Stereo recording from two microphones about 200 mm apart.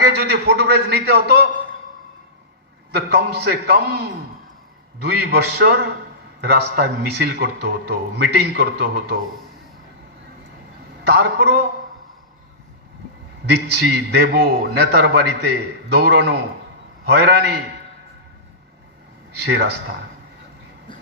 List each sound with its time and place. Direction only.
0.1 s a man's voice: 55° right (ahead or behind)
2.9 s a man's voice: 55° right (ahead or behind)
5.0 s a man's voice: 55° right (ahead or behind)
11.0 s a man's voice: 55° right (ahead or behind)
13.4 s a man's voice: 55° right (ahead or behind)
17.1 s a man's voice: 55° right (ahead or behind)
19.4 s a man's voice: 55° right (ahead or behind)